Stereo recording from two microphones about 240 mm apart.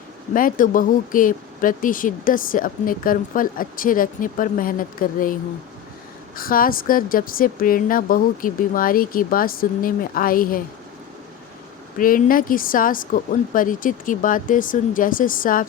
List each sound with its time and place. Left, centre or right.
0.3 s speech: left
11.9 s speech: left